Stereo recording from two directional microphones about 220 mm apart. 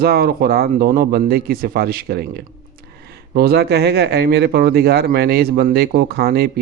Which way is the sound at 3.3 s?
45° right (ahead or behind).